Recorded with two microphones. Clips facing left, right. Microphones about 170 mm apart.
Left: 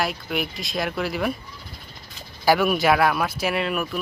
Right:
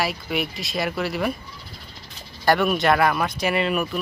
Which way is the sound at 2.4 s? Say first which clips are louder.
Even; centre (ahead or behind).